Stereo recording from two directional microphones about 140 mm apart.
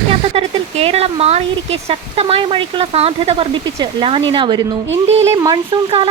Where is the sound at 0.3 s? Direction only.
50° right (ahead or behind).